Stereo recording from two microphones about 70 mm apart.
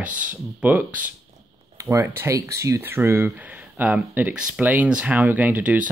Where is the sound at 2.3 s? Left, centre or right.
Right.